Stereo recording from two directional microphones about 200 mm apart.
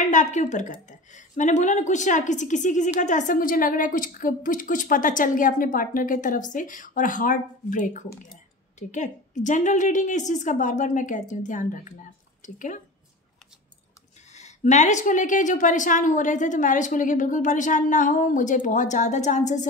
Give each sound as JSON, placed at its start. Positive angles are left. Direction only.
{"t": 0.0, "sound": "a woman's voice", "side_deg": 35}
{"t": 14.3, "sound": "a woman's voice", "side_deg": 35}